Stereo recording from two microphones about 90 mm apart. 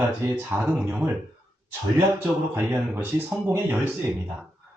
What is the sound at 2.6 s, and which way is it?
Speech, 25° right (ahead or behind).